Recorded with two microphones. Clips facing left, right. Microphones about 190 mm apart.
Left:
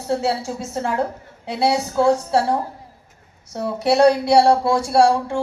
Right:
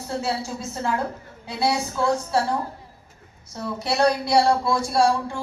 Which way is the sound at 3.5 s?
70° left (ahead or behind).